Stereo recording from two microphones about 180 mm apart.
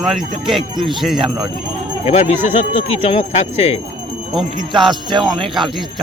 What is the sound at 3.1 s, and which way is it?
Speech, 35° left (ahead or behind).